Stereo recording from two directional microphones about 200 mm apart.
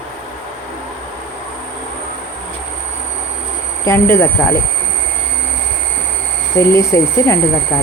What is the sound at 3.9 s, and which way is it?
Speech, 15° left (ahead or behind).